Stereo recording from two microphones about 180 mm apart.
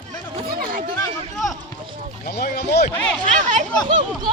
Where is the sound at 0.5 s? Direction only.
55° right (ahead or behind).